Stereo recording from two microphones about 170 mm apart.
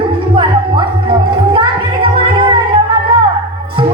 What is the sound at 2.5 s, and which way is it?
Music, 30° right (ahead or behind).